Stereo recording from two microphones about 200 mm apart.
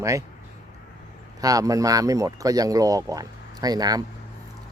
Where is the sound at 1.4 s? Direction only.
15° right (ahead or behind).